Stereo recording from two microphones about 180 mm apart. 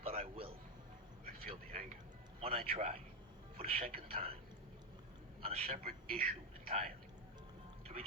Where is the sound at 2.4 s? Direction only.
35° right (ahead or behind).